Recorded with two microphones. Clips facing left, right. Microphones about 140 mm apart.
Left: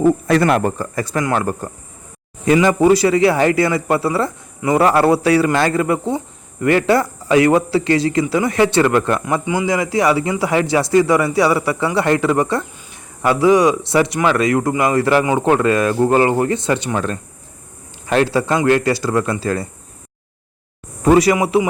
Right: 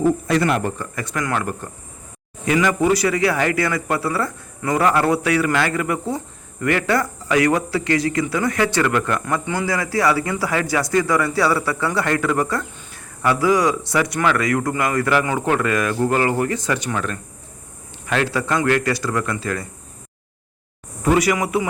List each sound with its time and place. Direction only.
0.3 s speech: 55° left (ahead or behind)
0.6 s speech: 35° left (ahead or behind)
9.2 s speech: 15° left (ahead or behind); by 19.6 s 30° left (ahead or behind)
21.0 s speech: 35° left (ahead or behind)
21.3 s speech: 25° left (ahead or behind)